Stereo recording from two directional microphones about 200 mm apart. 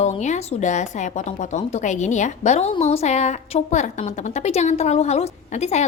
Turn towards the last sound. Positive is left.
turn(degrees=35)  # may be behind; listen again after turning